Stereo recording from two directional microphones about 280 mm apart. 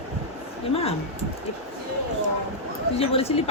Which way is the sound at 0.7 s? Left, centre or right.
Left.